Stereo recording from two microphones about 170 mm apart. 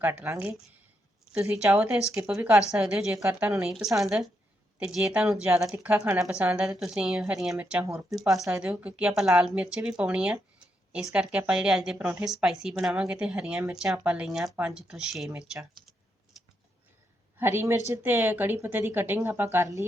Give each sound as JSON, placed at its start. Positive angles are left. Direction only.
{"t": 0.0, "sound": "speech", "side_deg": -10}
{"t": 15.3, "sound": "speech", "side_deg": -15}
{"t": 17.4, "sound": "speech", "side_deg": -15}